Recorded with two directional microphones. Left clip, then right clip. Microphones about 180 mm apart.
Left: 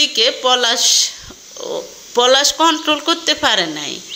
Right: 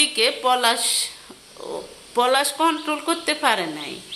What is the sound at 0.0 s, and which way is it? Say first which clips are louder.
Speech: left 5 dB; 10° left (ahead or behind).